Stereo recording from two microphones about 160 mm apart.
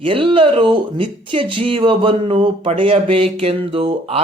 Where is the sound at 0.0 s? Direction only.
35° right (ahead or behind).